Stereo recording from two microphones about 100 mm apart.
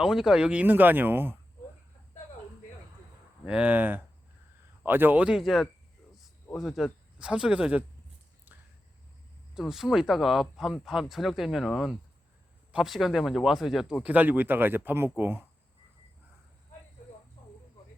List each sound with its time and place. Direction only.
0.0 s speech: 5° right (ahead or behind); by 1.4 s 20° right (ahead or behind)
3.4 s speech: 10° right (ahead or behind)
5.4 s speech: centre (ahead or behind)
6.1 s a sound: centre (ahead or behind)
7.2 s speech: 10° right (ahead or behind)
8.5 s a sound: 20° right (ahead or behind)
9.6 s speech: 5° right (ahead or behind); by 15.4 s 20° right (ahead or behind)